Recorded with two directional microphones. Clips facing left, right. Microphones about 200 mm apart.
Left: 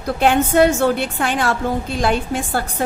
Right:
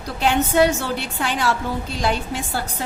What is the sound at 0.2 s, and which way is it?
A woman's voice, 55° left (ahead or behind).